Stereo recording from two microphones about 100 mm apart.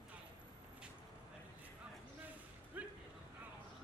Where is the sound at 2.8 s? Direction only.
15° right (ahead or behind).